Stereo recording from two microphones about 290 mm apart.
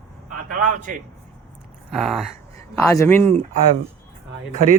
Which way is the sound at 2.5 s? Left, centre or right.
Centre.